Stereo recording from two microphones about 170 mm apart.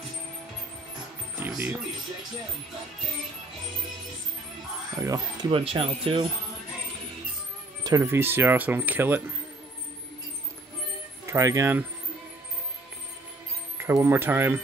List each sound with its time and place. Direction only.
1.4 s speech: 10° right (ahead or behind)
5.0 s speech: 20° right (ahead or behind)
5.5 s speech: 35° right (ahead or behind)
7.8 s speech: 20° right (ahead or behind)
11.2 s speech: 15° right (ahead or behind)
13.7 s speech: 15° right (ahead or behind)